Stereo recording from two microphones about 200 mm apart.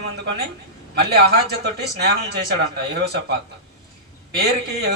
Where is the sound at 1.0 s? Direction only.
50° right (ahead or behind).